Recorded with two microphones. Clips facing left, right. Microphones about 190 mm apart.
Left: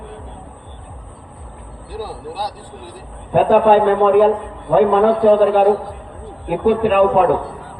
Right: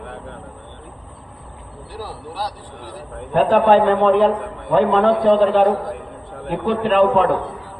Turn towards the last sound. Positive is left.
turn(degrees=10)  # may be behind; listen again after turning